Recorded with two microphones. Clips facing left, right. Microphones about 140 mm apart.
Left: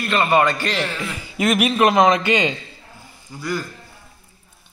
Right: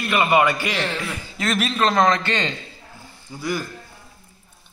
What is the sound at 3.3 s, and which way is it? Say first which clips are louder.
Speech: right 1 dB; 5° right (ahead or behind).